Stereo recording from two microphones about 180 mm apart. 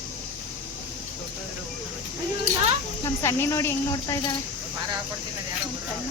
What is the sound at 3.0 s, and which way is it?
Speech, 15° left (ahead or behind).